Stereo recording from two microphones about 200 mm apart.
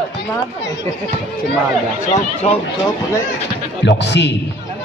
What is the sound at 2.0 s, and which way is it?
Speech, 35° left (ahead or behind).